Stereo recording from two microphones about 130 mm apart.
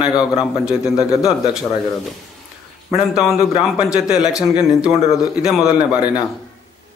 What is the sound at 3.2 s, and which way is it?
A man's voice, 5° right (ahead or behind).